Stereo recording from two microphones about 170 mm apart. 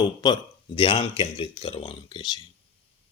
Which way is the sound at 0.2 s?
25° left (ahead or behind).